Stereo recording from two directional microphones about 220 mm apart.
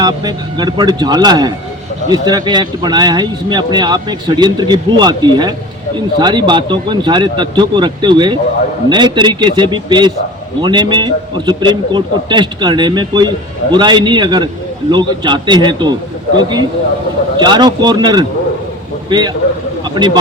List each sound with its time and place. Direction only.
0.0 s a man's voice: 20° right (ahead or behind)
17.4 s a man's voice: 20° right (ahead or behind)
19.9 s speech: 20° right (ahead or behind)